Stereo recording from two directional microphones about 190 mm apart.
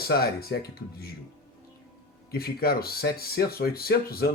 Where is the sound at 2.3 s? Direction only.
55° left (ahead or behind).